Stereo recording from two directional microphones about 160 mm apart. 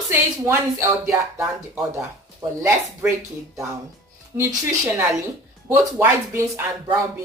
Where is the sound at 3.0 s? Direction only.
10° right (ahead or behind).